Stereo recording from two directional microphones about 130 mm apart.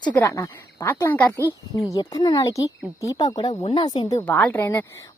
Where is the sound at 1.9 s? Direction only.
30° left (ahead or behind).